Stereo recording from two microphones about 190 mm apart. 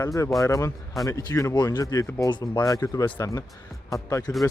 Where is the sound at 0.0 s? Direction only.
15° left (ahead or behind).